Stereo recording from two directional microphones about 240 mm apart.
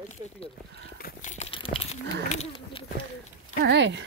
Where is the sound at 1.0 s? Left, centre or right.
Left.